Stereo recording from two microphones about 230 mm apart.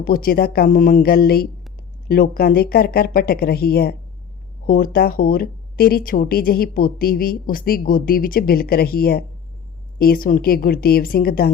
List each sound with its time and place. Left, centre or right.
0.0 s speech: left